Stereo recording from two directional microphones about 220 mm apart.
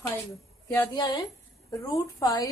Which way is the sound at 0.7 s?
20° left (ahead or behind).